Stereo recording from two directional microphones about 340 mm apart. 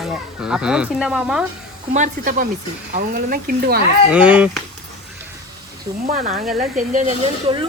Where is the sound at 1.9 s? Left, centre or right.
Right.